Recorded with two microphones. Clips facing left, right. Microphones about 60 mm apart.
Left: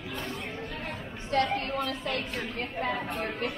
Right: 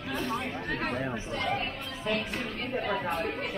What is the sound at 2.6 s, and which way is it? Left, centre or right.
Speech, left.